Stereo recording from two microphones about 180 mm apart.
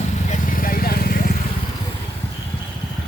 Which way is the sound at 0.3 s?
50° left (ahead or behind).